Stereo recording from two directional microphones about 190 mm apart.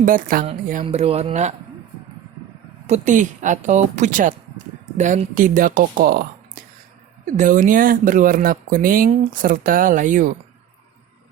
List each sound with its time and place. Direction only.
0.0 s speech: 45° right (ahead or behind)
0.7 s speech: 35° right (ahead or behind)
2.8 s speech: 40° right (ahead or behind)